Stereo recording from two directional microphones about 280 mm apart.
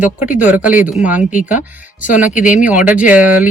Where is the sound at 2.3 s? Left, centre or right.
Left.